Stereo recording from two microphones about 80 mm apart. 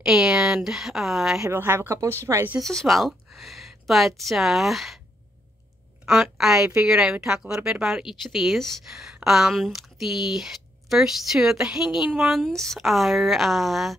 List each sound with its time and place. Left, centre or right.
0.0 s speech: centre
1.5 s a woman's voice: right
2.6 s speech: centre
6.0 s a woman's voice: centre